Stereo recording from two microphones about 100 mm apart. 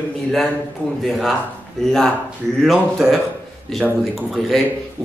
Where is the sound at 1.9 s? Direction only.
5° left (ahead or behind).